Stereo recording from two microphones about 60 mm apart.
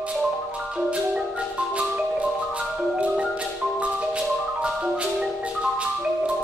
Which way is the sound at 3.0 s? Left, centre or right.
Centre.